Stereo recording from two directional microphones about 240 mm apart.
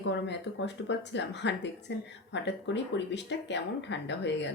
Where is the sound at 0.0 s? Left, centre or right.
Left.